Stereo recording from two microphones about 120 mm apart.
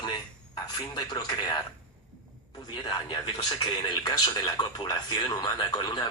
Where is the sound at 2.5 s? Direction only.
40° left (ahead or behind).